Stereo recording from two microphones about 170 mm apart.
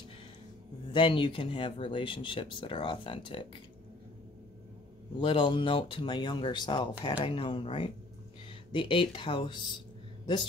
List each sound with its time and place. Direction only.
0.9 s speech: 30° left (ahead or behind)
5.2 s speech: 30° left (ahead or behind)